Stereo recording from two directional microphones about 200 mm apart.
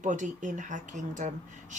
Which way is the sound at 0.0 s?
40° right (ahead or behind).